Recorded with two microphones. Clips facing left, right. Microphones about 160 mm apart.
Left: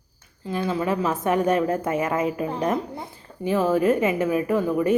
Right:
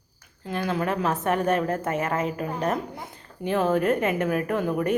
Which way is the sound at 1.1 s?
10° left (ahead or behind).